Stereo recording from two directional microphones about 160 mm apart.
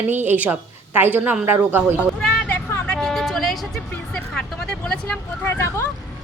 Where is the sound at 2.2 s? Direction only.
5° left (ahead or behind).